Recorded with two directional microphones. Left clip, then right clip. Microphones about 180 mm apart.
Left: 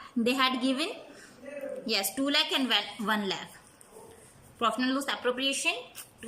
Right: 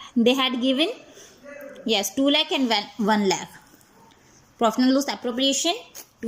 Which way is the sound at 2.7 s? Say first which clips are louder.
Right 6 dB; 30° right (ahead or behind).